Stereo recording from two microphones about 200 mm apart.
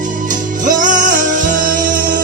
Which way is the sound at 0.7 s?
40° right (ahead or behind).